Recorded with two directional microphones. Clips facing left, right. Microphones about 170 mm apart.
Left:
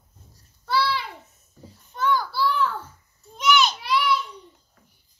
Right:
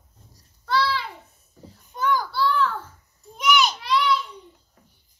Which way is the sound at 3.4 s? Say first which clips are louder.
Even; 10° right (ahead or behind).